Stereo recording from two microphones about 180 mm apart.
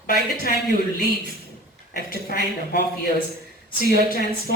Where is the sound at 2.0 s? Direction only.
55° left (ahead or behind).